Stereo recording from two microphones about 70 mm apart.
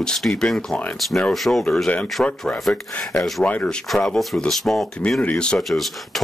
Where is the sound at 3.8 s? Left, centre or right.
Centre.